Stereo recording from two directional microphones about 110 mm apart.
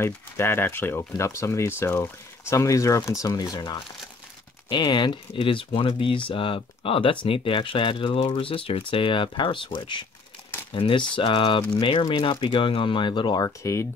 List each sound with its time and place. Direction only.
0.0 s speech: 20° left (ahead or behind); by 13.5 s 45° left (ahead or behind)
13.6 s speech: 25° left (ahead or behind)